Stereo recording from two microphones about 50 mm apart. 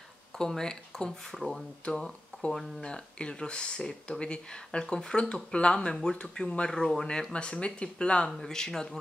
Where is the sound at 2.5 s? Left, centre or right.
Centre.